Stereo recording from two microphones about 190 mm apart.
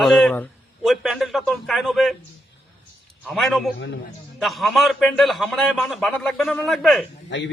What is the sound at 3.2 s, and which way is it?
Speech, centre (ahead or behind).